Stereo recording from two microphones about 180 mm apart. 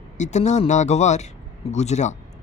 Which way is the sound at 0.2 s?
40° left (ahead or behind).